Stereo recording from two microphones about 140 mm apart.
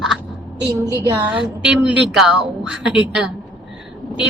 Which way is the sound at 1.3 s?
5° right (ahead or behind).